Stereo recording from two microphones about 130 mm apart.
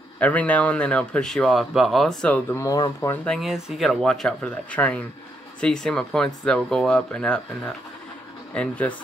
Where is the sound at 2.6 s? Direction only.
25° left (ahead or behind).